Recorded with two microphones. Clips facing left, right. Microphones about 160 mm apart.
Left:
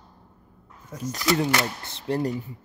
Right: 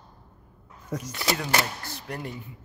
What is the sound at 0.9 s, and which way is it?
Speech, 90° right.